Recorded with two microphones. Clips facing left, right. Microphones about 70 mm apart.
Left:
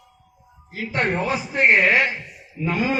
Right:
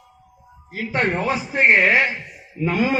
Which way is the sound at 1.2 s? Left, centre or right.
Right.